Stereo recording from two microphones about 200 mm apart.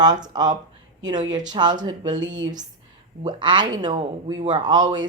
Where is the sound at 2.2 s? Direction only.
70° right (ahead or behind).